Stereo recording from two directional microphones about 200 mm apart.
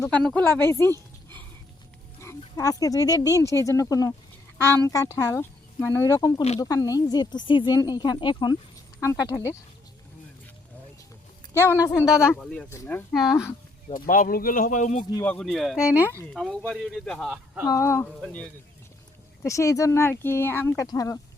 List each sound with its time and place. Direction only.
0.0 s speech: 5° left (ahead or behind)
2.6 s speech: 15° left (ahead or behind)
11.7 s speech: 10° left (ahead or behind)
11.9 s speech: 5° right (ahead or behind)
12.7 s speech: 15° left (ahead or behind)
13.9 s speech: 45° left (ahead or behind)
15.2 s speech: 5° left (ahead or behind)
17.7 s speech: 15° left (ahead or behind)